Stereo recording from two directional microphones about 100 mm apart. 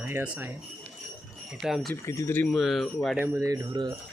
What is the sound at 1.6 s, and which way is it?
Speech, centre (ahead or behind).